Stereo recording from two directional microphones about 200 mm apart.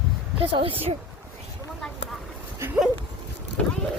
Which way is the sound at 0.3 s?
25° right (ahead or behind).